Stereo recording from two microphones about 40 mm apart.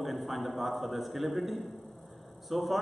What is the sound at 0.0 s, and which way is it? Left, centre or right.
A man's voice, centre.